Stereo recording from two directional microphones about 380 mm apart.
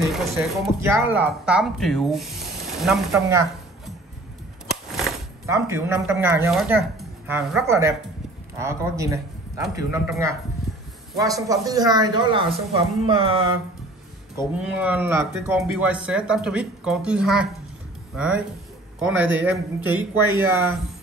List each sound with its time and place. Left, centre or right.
0.1 s a man's voice: centre
14.3 s speech: centre